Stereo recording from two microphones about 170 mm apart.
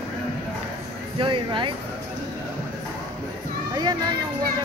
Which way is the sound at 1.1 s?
30° right (ahead or behind).